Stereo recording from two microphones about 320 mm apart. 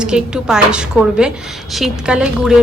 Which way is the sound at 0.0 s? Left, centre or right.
Centre.